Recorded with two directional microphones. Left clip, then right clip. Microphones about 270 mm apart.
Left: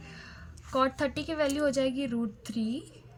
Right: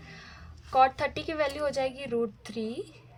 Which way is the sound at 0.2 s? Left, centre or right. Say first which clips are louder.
Even; right.